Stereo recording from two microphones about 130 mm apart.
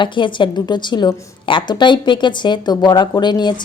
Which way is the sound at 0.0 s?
40° left (ahead or behind).